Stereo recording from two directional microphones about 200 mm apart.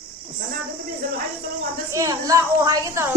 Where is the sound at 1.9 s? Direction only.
15° right (ahead or behind).